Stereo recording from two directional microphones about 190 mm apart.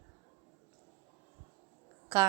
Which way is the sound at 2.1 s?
20° right (ahead or behind).